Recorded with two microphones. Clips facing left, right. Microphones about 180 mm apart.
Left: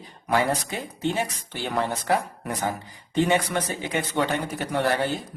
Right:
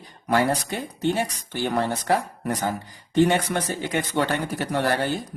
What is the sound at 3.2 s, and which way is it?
Speech, 65° right (ahead or behind).